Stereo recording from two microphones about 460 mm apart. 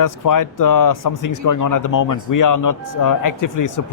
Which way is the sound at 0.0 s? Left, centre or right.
Left.